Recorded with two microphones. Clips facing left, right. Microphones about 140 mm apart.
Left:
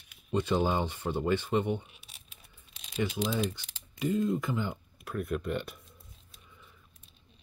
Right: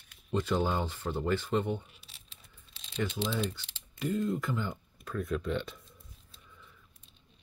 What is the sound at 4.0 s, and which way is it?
Speech, 15° left (ahead or behind).